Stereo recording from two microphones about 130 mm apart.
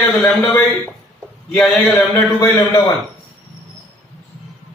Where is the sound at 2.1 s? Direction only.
25° left (ahead or behind).